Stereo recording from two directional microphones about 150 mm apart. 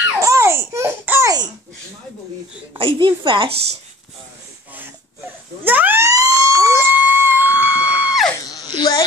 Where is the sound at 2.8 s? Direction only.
35° right (ahead or behind).